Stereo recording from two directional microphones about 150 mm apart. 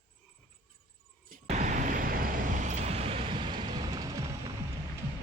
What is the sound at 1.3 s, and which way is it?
Vehicle, 55° right (ahead or behind).